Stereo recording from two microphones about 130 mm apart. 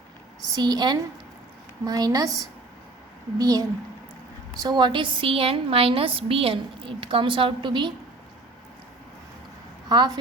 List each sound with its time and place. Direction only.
0.5 s a woman's voice: 30° right (ahead or behind)
3.3 s a woman's voice: 30° right (ahead or behind)
9.9 s a woman's voice: 30° right (ahead or behind)